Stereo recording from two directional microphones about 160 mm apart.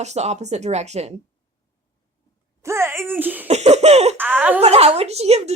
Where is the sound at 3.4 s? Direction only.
40° right (ahead or behind).